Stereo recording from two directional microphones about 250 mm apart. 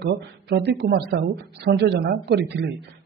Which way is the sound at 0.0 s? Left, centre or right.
Right.